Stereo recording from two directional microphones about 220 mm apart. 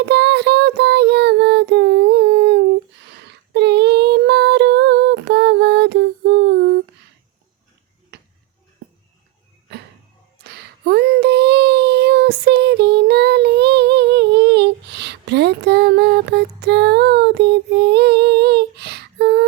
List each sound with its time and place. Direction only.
0.0 s child singing: 50° right (ahead or behind)
3.1 s a sound: 50° right (ahead or behind)
8.1 s tick-tock: 45° right (ahead or behind)
10.3 s child singing: 45° right (ahead or behind)